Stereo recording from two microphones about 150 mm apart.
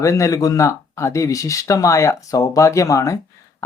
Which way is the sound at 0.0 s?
20° left (ahead or behind).